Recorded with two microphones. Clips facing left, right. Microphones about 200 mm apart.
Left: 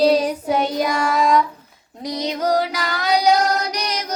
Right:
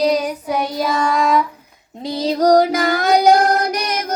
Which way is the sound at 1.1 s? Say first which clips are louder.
Left 1 dB; centre (ahead or behind).